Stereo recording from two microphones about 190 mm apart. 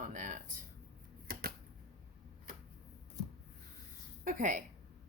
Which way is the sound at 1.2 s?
50° right (ahead or behind).